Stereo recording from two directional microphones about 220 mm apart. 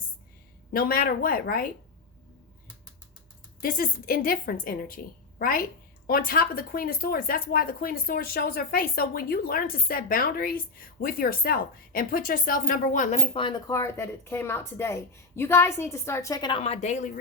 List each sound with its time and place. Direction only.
0.7 s speech: 40° left (ahead or behind)
3.6 s a woman's voice: 40° left (ahead or behind)